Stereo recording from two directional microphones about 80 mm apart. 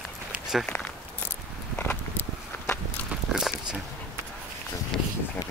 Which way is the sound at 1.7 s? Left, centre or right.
Left.